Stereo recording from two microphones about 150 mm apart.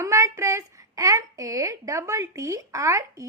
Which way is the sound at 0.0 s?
20° right (ahead or behind).